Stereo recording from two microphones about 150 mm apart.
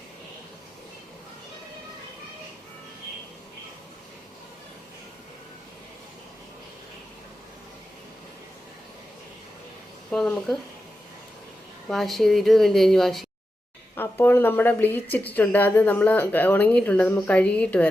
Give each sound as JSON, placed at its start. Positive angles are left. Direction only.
{"t": 10.1, "sound": "a woman's voice", "side_deg": 5}
{"t": 11.9, "sound": "a woman's voice", "side_deg": 0}
{"t": 13.9, "sound": "a woman's voice", "side_deg": 15}